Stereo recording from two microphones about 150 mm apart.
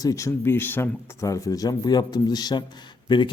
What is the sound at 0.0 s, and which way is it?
Speech, 20° left (ahead or behind).